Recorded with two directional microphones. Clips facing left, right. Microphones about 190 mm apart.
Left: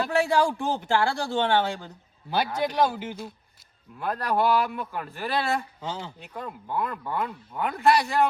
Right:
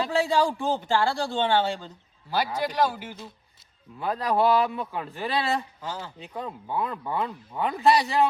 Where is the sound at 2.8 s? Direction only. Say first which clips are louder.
Left 1 dB; 20° left (ahead or behind).